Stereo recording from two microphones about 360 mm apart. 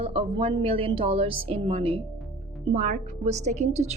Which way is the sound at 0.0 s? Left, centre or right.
Centre.